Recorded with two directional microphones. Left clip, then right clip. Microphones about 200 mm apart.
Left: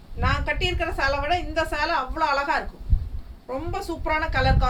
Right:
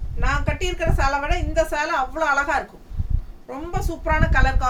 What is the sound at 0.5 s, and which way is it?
A woman's voice, 15° right (ahead or behind).